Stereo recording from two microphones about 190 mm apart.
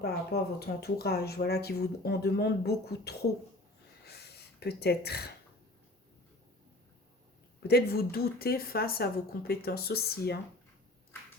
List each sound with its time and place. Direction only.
0.0 s speech: 55° left (ahead or behind)
4.0 s a sound: 60° left (ahead or behind)
7.7 s speech: 55° left (ahead or behind)